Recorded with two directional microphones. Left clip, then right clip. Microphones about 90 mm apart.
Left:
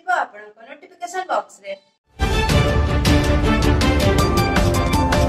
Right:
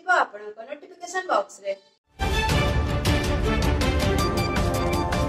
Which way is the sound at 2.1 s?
Centre (ahead or behind).